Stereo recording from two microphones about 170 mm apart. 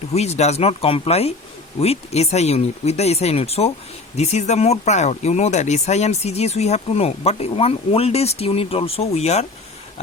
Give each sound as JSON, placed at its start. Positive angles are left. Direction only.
{"t": 0.1, "sound": "speech", "side_deg": 40}